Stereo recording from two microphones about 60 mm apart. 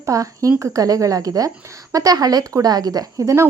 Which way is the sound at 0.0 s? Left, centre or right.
Right.